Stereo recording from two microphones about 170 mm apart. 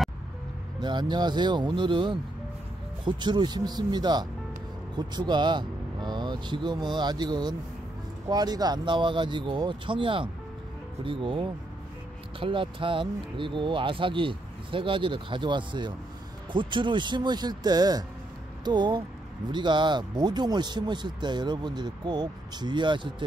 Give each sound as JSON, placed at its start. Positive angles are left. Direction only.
{"t": 0.7, "sound": "speech", "side_deg": -25}